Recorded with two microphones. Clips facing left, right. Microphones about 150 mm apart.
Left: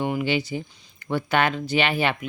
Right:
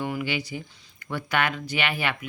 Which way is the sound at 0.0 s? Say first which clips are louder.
Left 5 dB; 25° left (ahead or behind).